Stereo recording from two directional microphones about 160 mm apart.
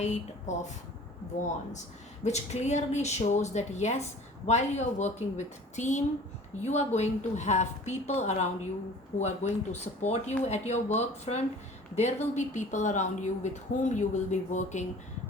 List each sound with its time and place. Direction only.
0.0 s speech: 45° left (ahead or behind)
2.2 s speech: 45° left (ahead or behind)